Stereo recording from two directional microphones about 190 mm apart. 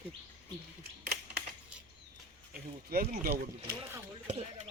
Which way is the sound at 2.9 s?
50° right (ahead or behind).